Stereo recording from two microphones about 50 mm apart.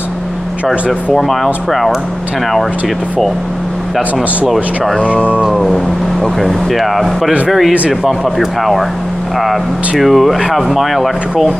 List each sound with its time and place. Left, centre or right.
1.1 s speech: centre
5.0 s speech: left
5.4 s speech: centre